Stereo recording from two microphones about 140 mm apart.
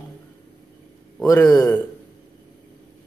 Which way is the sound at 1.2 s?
25° left (ahead or behind).